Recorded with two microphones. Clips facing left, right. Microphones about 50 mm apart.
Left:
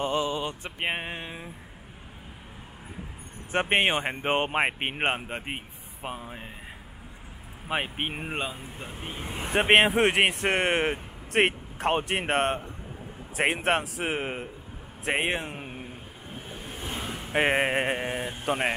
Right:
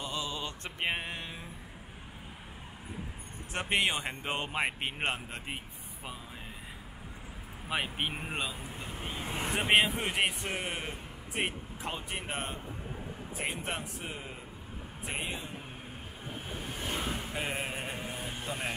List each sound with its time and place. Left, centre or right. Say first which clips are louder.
0.0 s mantra: left 9 dB; left
0.7 s speech: left 3 dB; left
3.5 s speech: left 7 dB; left
7.7 s speech: left 4 dB; left
9.5 s a man's voice: left 7 dB; left
16.6 s vehicle: even; centre
17.3 s mantra: left 12 dB; left
18.4 s speech: left 11 dB; left